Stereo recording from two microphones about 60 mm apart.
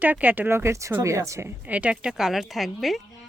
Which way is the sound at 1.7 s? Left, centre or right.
Right.